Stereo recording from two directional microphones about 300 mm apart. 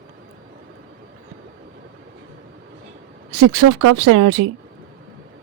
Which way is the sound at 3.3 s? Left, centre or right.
Right.